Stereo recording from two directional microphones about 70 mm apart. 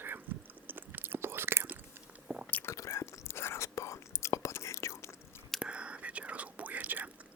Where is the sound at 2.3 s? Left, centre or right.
Right.